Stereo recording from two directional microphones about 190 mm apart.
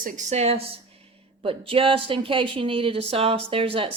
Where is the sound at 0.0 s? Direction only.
40° right (ahead or behind).